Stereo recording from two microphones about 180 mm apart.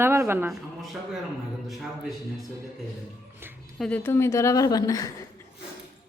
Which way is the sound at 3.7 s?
Centre (ahead or behind).